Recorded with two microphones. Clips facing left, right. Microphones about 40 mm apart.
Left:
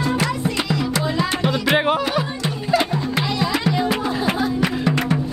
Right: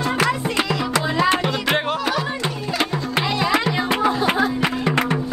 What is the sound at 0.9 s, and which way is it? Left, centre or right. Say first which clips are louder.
Music: right 6 dB; right.